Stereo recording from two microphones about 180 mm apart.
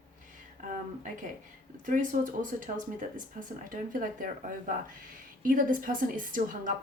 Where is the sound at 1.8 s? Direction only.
50° right (ahead or behind).